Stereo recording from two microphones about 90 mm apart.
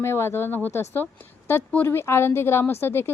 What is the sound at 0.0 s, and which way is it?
Speech, 30° left (ahead or behind).